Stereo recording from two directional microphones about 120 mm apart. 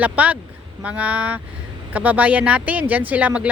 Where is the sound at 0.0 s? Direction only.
10° right (ahead or behind).